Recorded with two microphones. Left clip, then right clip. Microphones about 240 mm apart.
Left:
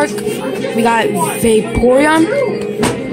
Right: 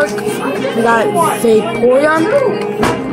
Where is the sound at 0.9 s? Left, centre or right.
Left.